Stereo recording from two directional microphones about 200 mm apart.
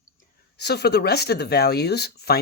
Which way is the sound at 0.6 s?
55° left (ahead or behind).